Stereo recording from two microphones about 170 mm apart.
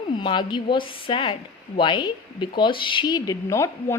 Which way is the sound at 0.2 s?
30° left (ahead or behind).